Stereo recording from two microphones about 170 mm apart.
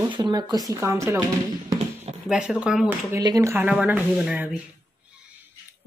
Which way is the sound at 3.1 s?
20° right (ahead or behind).